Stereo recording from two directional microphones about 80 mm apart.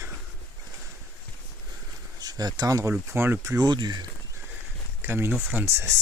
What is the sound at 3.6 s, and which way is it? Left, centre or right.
Speech, right.